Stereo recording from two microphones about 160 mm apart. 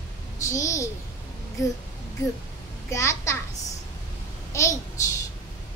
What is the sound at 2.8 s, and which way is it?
Babbling, 20° left (ahead or behind).